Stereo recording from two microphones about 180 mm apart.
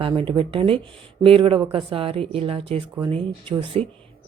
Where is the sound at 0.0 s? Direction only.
30° right (ahead or behind).